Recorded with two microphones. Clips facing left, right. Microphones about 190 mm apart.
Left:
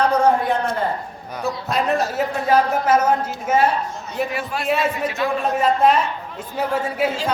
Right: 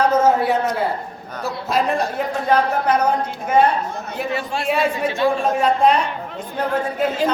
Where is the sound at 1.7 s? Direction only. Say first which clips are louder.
Right 1 dB; centre (ahead or behind).